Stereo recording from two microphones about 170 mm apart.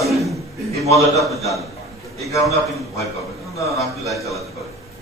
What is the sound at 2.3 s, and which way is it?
Speech, 20° left (ahead or behind).